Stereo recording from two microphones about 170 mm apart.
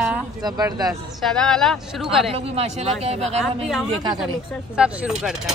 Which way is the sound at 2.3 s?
35° right (ahead or behind).